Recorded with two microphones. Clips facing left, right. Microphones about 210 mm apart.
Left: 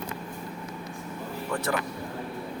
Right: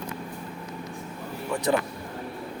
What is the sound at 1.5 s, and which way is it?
Speech, 15° right (ahead or behind).